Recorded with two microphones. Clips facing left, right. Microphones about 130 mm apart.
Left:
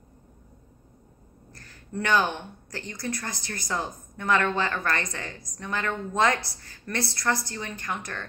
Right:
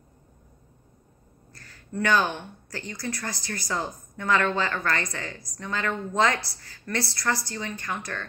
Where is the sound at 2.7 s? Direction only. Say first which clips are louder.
Even; 20° left (ahead or behind).